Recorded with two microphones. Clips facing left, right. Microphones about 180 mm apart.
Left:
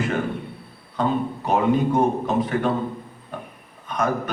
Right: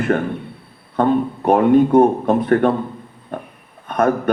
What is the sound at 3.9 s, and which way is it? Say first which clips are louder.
Speech: right 6 dB; 55° right (ahead or behind).